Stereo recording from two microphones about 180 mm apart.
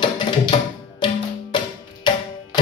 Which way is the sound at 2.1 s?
25° left (ahead or behind).